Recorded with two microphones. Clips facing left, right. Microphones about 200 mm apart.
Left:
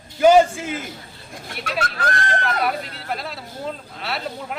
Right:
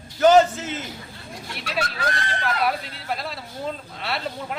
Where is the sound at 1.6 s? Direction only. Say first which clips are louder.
Left 2 dB; 50° left (ahead or behind).